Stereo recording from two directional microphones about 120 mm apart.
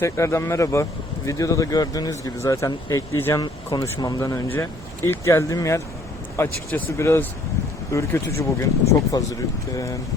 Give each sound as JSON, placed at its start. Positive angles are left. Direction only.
{"t": 0.0, "sound": "speech", "side_deg": 25}
{"t": 3.4, "sound": "speech", "side_deg": 35}